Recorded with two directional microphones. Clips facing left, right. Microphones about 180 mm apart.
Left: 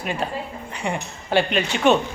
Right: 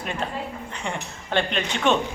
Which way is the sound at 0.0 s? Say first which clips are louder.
Left 2 dB; 10° left (ahead or behind).